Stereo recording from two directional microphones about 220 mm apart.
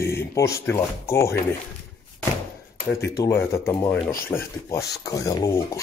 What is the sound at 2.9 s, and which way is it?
Speech, 15° left (ahead or behind).